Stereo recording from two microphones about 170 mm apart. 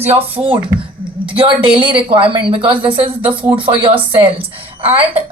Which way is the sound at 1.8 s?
30° right (ahead or behind).